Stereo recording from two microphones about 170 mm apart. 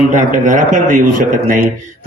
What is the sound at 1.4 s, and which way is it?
Speech, 60° right (ahead or behind).